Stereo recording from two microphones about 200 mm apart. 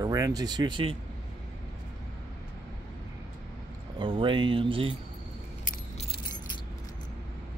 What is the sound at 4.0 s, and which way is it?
Speech, 25° right (ahead or behind).